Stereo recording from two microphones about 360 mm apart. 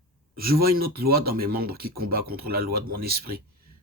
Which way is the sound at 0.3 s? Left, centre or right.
Right.